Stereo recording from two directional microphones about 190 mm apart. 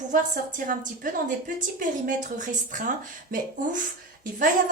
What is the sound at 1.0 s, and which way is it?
Speech, 45° right (ahead or behind).